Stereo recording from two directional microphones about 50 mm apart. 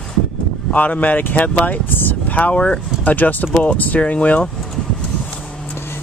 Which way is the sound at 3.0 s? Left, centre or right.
Left.